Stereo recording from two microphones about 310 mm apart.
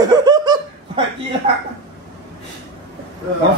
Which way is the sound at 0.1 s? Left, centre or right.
Centre.